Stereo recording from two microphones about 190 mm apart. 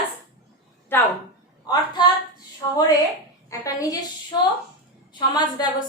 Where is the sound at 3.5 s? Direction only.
20° left (ahead or behind).